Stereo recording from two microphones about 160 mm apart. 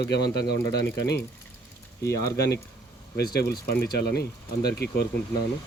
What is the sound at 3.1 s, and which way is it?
Speech, 75° left (ahead or behind).